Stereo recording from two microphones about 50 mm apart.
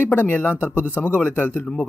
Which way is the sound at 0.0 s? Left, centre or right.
Left.